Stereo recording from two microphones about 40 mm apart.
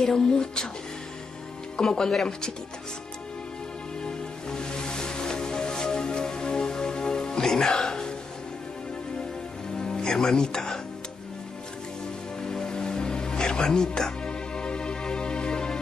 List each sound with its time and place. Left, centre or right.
0.0 s speech: centre
1.8 s speech: centre
4.0 s music: centre
9.8 s a man's voice: centre
12.4 s music: centre